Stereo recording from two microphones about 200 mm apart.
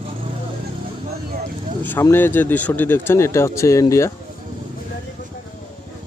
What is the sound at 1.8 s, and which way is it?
Speech, 10° left (ahead or behind).